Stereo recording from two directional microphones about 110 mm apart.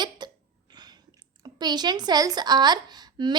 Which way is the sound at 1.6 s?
40° right (ahead or behind).